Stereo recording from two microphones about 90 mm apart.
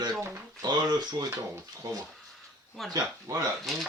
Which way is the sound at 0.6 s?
50° right (ahead or behind).